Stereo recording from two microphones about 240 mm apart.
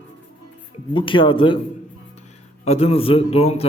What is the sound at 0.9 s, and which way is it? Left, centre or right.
Speech, left.